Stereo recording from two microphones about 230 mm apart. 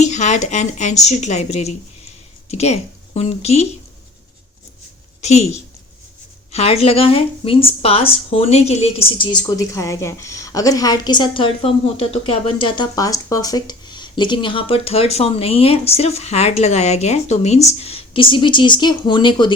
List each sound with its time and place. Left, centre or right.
0.0 s a woman's voice: left
5.2 s speech: left